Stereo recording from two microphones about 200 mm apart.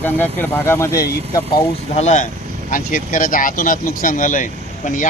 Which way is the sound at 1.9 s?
35° left (ahead or behind).